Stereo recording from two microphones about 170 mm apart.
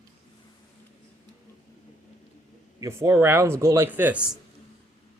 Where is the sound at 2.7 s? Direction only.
20° right (ahead or behind).